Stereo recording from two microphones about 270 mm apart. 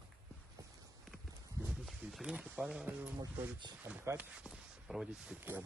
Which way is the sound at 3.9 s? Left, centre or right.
Centre.